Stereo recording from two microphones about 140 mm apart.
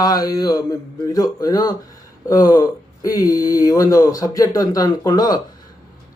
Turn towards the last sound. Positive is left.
turn(degrees=30)  # may be behind; listen again after turning